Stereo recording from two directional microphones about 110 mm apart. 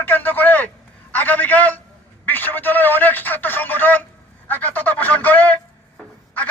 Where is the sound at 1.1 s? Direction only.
15° left (ahead or behind).